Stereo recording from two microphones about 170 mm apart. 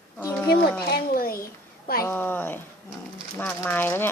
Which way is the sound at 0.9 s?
60° left (ahead or behind).